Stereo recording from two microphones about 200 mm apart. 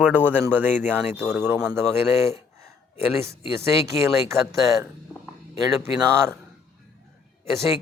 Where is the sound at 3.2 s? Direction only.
15° right (ahead or behind).